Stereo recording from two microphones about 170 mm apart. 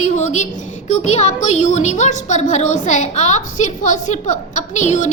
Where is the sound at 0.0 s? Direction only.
40° left (ahead or behind).